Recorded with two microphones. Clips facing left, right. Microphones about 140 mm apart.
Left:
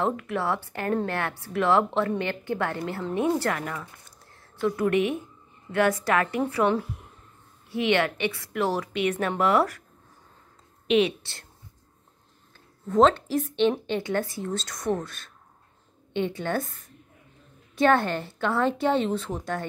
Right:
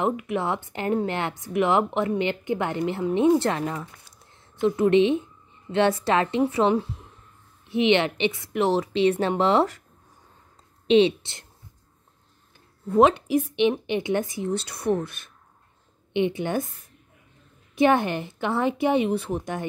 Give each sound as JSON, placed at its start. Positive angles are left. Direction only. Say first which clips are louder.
{"t": 0.0, "sound": "speech", "louder": "right 2 dB", "side_deg": -15}
{"t": 10.9, "sound": "speech", "louder": "right 4 dB", "side_deg": -25}
{"t": 12.9, "sound": "speech", "louder": "right 2 dB", "side_deg": -10}